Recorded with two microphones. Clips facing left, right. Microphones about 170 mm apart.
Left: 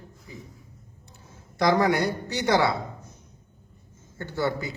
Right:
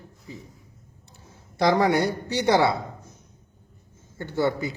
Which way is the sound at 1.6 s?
25° right (ahead or behind).